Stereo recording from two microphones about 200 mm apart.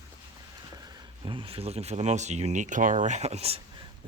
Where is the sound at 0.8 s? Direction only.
20° right (ahead or behind).